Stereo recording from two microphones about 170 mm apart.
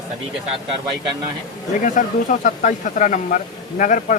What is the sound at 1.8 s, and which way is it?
Speech, 50° left (ahead or behind).